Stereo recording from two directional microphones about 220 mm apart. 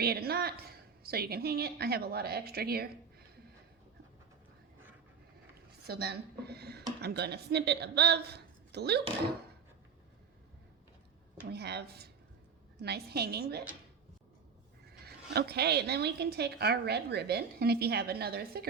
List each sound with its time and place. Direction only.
0.0 s a woman's voice: 45° right (ahead or behind)
5.8 s speech: 45° right (ahead or behind)
11.4 s speech: 50° right (ahead or behind)
15.0 s speech: 45° right (ahead or behind)